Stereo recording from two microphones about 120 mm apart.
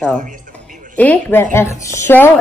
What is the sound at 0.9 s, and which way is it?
A woman's voice, 15° left (ahead or behind).